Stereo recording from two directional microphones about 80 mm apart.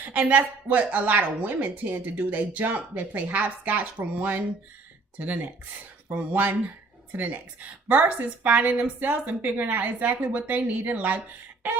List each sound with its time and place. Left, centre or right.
0.0 s speech: centre
6.1 s speech: right